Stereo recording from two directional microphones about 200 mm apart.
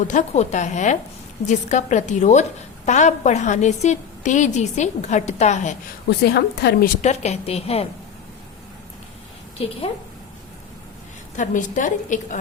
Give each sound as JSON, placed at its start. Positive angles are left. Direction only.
{"t": 0.1, "sound": "a woman's voice", "side_deg": 35}
{"t": 6.1, "sound": "a woman's voice", "side_deg": 55}
{"t": 7.0, "sound": "a woman's voice", "side_deg": 35}
{"t": 11.3, "sound": "a woman's voice", "side_deg": 40}